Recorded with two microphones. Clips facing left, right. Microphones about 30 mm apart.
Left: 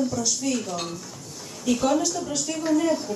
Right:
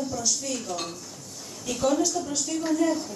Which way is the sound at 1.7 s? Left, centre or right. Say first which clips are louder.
Left 2 dB; left.